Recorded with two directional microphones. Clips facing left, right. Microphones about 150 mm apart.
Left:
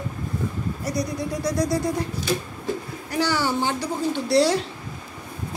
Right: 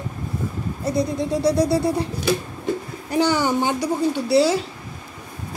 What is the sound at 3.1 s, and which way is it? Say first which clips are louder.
A woman's voice: right 4 dB; 20° right (ahead or behind).